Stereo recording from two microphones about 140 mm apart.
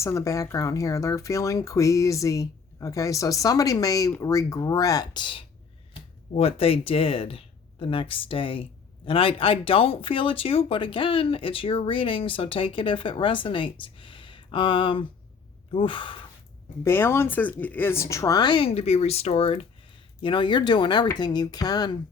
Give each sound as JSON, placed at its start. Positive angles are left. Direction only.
{"t": 0.0, "sound": "speech", "side_deg": 20}
{"t": 6.3, "sound": "speech", "side_deg": 45}
{"t": 16.8, "sound": "speech", "side_deg": 15}